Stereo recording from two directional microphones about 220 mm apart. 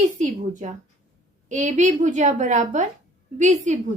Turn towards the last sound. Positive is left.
turn(degrees=-35)  # may be behind; listen again after turning